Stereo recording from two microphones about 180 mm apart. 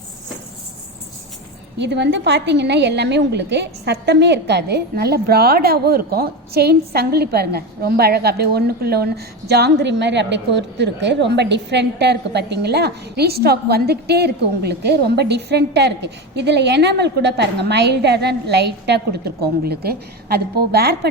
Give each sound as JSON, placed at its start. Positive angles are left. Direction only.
{"t": 1.8, "sound": "a woman's voice", "side_deg": -75}